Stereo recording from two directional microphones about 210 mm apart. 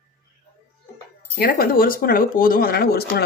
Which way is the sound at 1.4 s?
45° left (ahead or behind).